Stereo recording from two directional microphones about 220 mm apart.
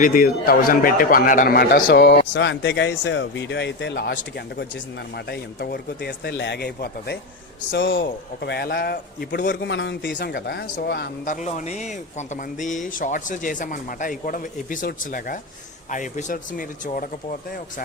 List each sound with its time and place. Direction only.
0.0 s a man's voice: 40° left (ahead or behind)
11.4 s speech: 30° left (ahead or behind)